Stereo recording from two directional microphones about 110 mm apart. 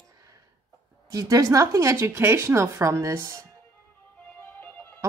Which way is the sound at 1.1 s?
35° right (ahead or behind).